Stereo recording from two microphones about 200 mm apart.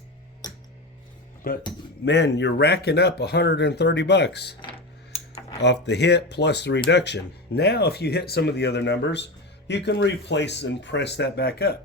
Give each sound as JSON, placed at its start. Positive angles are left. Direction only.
{"t": 0.4, "sound": "a sound", "side_deg": 20}
{"t": 1.5, "sound": "speech", "side_deg": 50}
{"t": 2.0, "sound": "speech", "side_deg": 60}
{"t": 5.5, "sound": "speech", "side_deg": 60}